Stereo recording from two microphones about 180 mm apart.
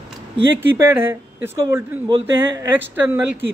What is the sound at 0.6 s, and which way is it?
A man's voice, 10° right (ahead or behind).